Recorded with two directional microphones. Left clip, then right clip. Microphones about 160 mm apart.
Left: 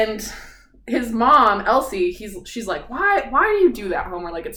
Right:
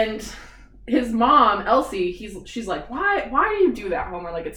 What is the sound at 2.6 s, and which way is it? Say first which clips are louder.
A woman's voice: left 3 dB; 25° left (ahead or behind).